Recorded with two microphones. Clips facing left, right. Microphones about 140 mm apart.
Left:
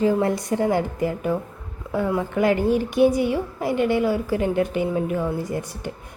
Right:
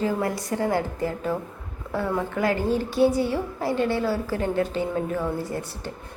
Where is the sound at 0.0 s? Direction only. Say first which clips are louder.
Left 5 dB; 20° left (ahead or behind).